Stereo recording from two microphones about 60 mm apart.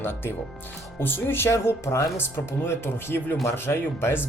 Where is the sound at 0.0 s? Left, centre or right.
Left.